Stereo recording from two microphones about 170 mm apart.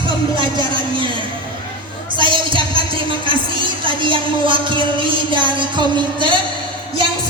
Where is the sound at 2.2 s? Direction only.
30° right (ahead or behind).